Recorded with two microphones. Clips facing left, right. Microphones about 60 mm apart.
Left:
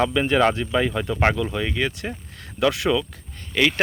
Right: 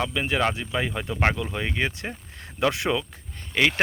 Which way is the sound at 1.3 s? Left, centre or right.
Centre.